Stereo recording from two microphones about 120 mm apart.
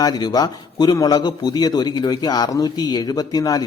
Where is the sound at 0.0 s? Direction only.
35° left (ahead or behind).